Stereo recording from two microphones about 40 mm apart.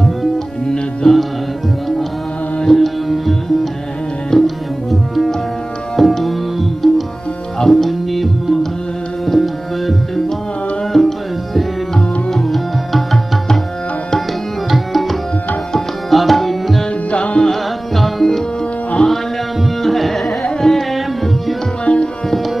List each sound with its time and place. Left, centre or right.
1.0 s music: centre
2.6 s music: centre
5.9 s music: centre
10.9 s tabla: centre
12.3 s music: centre
14.7 s tabla: centre
17.1 s music: left
17.5 s tabla: centre
19.8 s tabla: centre
21.8 s tabla: left